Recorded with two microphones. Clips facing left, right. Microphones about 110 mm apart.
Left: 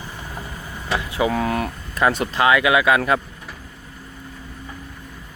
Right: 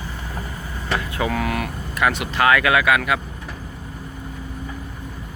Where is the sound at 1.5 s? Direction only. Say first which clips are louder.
Left 2 dB; 30° left (ahead or behind).